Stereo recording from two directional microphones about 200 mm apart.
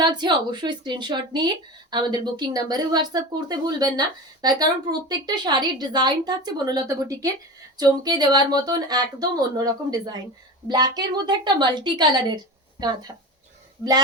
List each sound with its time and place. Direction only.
0.0 s speech: 20° right (ahead or behind)